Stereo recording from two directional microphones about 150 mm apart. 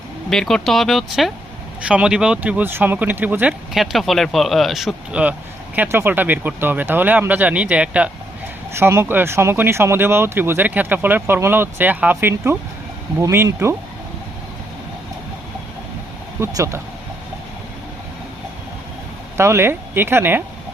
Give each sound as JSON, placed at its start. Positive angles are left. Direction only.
{"t": 0.3, "sound": "speech", "side_deg": 5}
{"t": 16.4, "sound": "speech", "side_deg": -20}
{"t": 19.4, "sound": "speech", "side_deg": -15}